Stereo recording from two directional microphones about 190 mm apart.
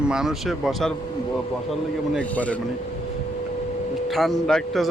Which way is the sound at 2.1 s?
5° left (ahead or behind).